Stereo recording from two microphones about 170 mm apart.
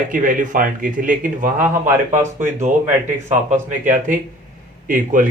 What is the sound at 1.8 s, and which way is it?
Speech, 15° right (ahead or behind).